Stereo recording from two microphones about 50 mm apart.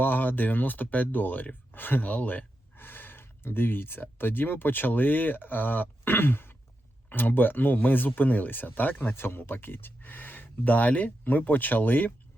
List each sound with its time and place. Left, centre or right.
0.0 s speech: left